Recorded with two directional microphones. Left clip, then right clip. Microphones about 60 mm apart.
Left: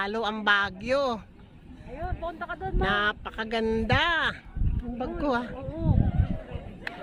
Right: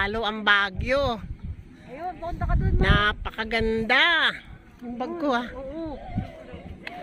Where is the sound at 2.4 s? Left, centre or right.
Right.